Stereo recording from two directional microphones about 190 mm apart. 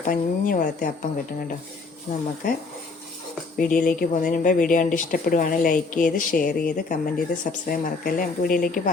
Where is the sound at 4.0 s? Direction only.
45° left (ahead or behind).